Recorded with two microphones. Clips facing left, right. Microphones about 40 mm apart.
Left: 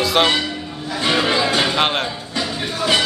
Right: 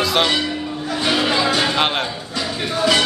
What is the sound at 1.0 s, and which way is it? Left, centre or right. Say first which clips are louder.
Speech: left 1 dB; centre.